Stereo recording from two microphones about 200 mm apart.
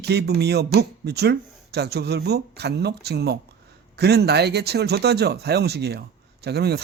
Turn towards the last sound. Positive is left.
turn(degrees=-55)  # may be behind; listen again after turning